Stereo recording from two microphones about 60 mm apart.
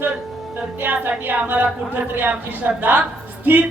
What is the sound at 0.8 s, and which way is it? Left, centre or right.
A woman's voice, right.